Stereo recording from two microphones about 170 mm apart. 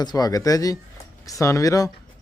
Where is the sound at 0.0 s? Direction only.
25° left (ahead or behind).